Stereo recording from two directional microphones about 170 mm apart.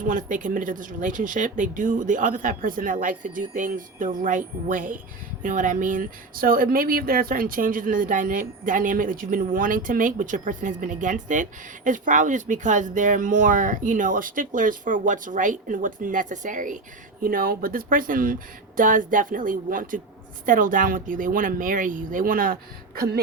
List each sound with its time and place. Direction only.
0.1 s speech: 50° right (ahead or behind)
17.2 s speech: 60° right (ahead or behind)